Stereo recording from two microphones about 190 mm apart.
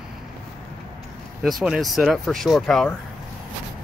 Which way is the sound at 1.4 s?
Centre (ahead or behind).